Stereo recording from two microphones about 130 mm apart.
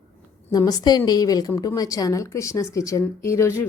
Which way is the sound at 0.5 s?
30° left (ahead or behind).